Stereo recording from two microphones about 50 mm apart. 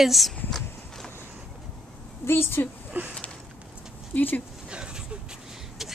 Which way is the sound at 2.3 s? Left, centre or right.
Left.